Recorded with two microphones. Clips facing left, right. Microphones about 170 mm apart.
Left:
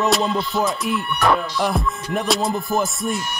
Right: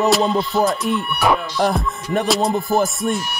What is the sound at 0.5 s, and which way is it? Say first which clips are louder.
Music: right 3 dB; centre (ahead or behind).